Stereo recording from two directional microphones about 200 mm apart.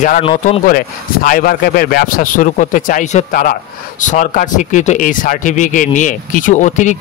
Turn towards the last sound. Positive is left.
turn(degrees=35)  # may be behind; listen again after turning